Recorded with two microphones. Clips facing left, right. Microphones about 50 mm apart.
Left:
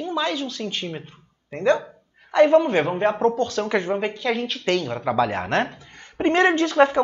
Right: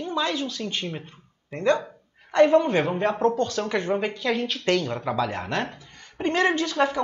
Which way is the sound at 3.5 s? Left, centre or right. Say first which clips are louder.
Left 2 dB; centre.